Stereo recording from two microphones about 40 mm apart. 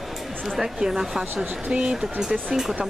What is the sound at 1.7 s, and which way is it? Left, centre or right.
Speech, right.